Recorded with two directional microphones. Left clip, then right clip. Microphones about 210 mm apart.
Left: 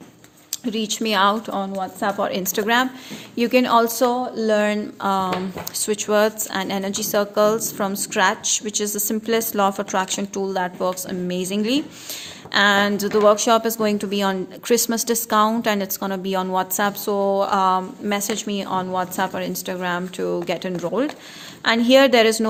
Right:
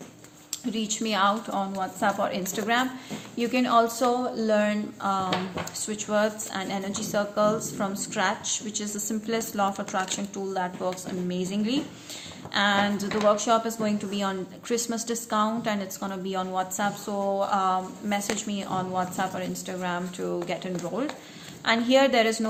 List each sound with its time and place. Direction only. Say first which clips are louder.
0.6 s a woman's voice: left 6 dB; 45° left (ahead or behind)